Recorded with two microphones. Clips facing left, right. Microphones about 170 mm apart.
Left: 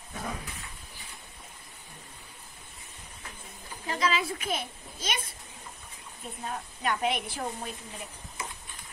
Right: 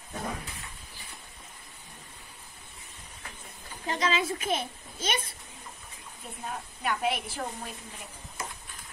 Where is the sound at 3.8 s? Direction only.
25° right (ahead or behind).